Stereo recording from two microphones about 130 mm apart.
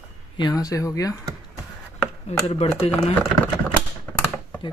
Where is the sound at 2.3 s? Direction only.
55° left (ahead or behind).